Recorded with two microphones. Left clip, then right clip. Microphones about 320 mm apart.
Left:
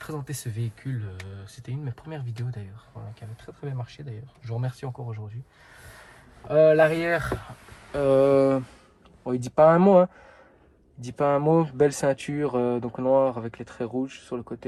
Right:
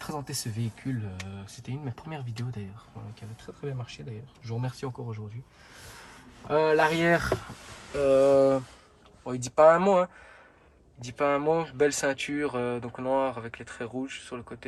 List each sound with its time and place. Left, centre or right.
1.8 s speech: centre
6.6 s speech: centre
8.0 s speech: left